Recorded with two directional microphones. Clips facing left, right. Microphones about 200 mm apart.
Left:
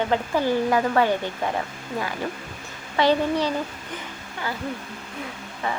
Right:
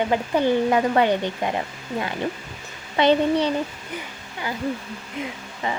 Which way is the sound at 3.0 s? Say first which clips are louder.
Right 2 dB; 20° right (ahead or behind).